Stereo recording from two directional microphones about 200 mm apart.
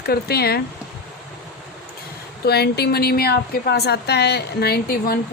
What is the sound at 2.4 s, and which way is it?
A woman's voice, 55° left (ahead or behind).